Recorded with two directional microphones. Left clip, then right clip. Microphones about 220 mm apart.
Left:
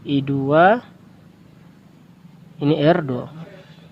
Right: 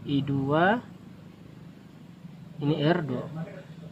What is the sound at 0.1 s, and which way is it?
Speech, 40° left (ahead or behind).